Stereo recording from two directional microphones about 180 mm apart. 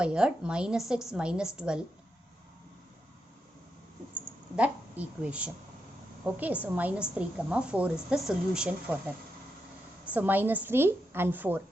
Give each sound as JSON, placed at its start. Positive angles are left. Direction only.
{"t": 0.0, "sound": "a woman's voice", "side_deg": -5}
{"t": 4.5, "sound": "a woman's voice", "side_deg": -5}
{"t": 10.2, "sound": "a woman's voice", "side_deg": -10}